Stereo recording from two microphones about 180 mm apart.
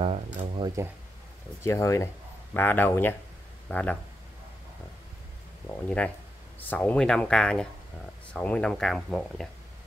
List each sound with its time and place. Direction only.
0.0 s speech: 30° right (ahead or behind)
1.6 s speech: 15° left (ahead or behind)
5.7 s speech: 5° left (ahead or behind)